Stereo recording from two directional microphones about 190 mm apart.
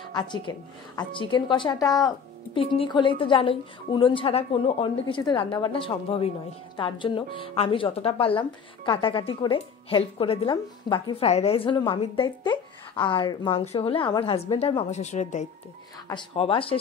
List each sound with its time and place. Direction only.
0.1 s speech: 25° left (ahead or behind); by 15.4 s 40° left (ahead or behind)
16.1 s speech: 25° left (ahead or behind)